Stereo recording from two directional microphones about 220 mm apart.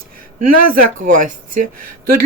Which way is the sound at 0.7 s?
40° right (ahead or behind).